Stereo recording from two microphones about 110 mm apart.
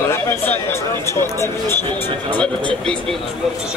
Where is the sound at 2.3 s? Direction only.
10° left (ahead or behind).